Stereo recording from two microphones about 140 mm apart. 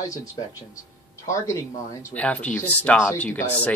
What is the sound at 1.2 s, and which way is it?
Speech, 20° left (ahead or behind).